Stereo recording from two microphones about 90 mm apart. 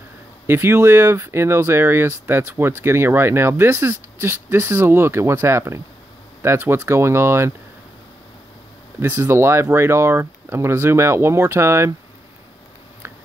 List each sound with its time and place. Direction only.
0.5 s speech: 25° right (ahead or behind)
9.2 s speech: 30° right (ahead or behind)